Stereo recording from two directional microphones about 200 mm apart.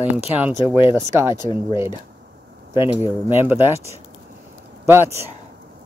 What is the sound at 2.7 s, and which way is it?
Speech, 25° left (ahead or behind).